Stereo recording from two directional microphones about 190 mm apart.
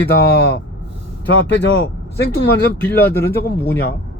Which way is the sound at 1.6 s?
65° left (ahead or behind).